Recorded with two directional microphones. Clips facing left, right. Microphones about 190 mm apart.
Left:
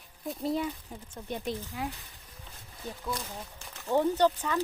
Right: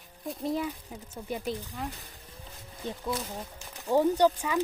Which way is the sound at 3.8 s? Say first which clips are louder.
Right 2 dB; 10° right (ahead or behind).